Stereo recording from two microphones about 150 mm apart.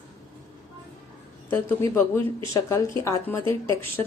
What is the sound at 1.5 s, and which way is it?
A woman's voice, 15° left (ahead or behind).